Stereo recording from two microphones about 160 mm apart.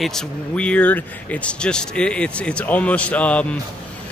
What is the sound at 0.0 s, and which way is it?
Speech, 5° left (ahead or behind).